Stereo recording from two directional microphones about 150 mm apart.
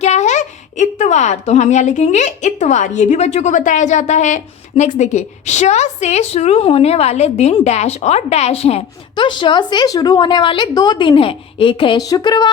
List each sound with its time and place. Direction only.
0.0 s a woman's voice: 50° left (ahead or behind); by 12.5 s 30° left (ahead or behind)